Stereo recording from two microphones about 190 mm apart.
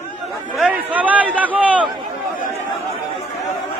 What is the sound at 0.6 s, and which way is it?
A man's voice, 5° right (ahead or behind).